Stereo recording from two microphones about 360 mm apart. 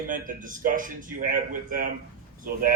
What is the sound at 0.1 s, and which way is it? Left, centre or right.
Speech, right.